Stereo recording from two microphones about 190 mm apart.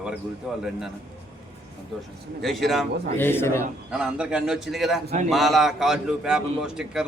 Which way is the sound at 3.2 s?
10° left (ahead or behind).